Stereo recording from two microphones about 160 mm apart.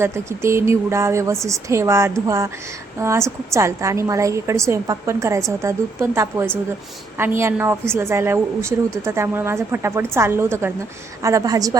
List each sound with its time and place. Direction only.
0.0 s a woman's voice: 15° right (ahead or behind)